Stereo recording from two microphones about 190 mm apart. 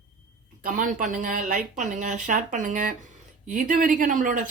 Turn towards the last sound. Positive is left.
turn(degrees=-45)  # may be behind; listen again after turning